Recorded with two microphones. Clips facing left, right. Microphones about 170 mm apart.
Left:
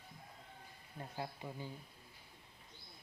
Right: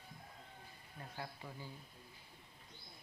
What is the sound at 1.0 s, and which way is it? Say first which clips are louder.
Speech: left 4 dB; 20° left (ahead or behind).